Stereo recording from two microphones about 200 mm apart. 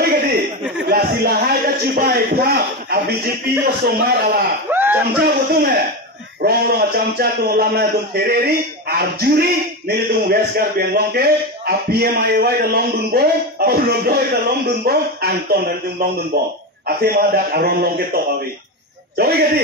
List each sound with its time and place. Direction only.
0.0 s chuckle: 50° right (ahead or behind)
0.8 s a sound: 50° right (ahead or behind)
3.8 s speech: 55° right (ahead or behind)
4.6 s speech: 10° right (ahead or behind)
5.2 s a man's voice: 50° right (ahead or behind)